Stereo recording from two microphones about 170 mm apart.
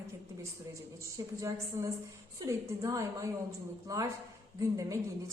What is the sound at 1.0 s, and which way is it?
A woman's voice, 20° right (ahead or behind).